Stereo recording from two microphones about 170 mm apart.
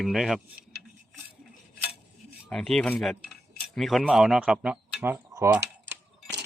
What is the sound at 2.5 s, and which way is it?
Speech, 5° left (ahead or behind).